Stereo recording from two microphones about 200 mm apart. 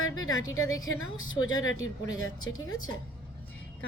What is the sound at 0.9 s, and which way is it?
Speech, 90° left.